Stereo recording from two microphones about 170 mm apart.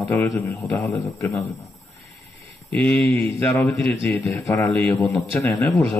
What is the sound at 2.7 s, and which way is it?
Speech, 5° left (ahead or behind).